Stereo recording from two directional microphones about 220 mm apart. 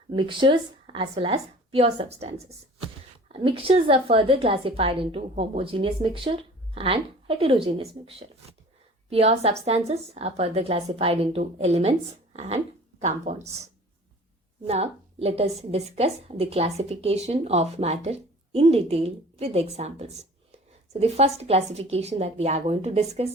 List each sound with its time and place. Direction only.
0.1 s a woman's voice: 20° right (ahead or behind)
13.0 s speech: 30° right (ahead or behind)
14.6 s a woman's voice: 25° right (ahead or behind)